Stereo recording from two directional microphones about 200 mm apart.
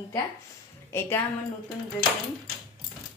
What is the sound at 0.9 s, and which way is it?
Speech, 10° left (ahead or behind).